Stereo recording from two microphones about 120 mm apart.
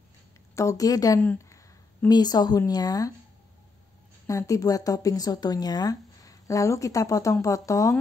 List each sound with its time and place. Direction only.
0.6 s speech: 30° left (ahead or behind)
4.3 s speech: 25° left (ahead or behind)